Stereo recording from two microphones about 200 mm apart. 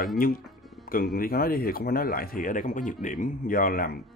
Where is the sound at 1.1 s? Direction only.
45° left (ahead or behind).